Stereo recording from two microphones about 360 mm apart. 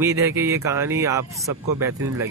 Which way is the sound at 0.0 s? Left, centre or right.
Centre.